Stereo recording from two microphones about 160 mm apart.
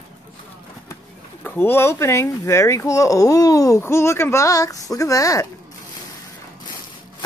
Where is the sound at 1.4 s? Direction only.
10° left (ahead or behind).